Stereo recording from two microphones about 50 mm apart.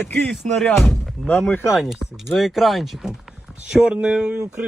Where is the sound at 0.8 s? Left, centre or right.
Centre.